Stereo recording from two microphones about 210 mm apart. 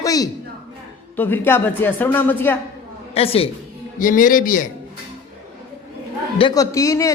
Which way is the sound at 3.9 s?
40° left (ahead or behind).